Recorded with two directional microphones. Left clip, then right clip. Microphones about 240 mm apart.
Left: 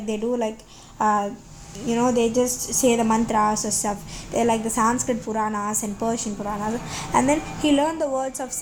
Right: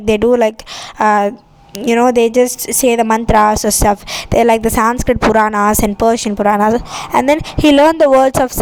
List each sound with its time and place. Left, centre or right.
0.0 s a woman's voice: right